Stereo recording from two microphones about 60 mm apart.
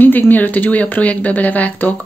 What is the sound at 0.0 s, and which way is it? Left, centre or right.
Speech, left.